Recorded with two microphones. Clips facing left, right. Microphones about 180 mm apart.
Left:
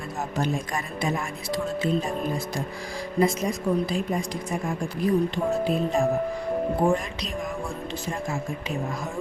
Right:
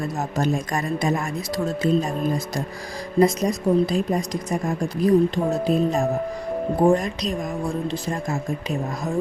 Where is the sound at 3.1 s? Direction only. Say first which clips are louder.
Right 5 dB; 40° right (ahead or behind).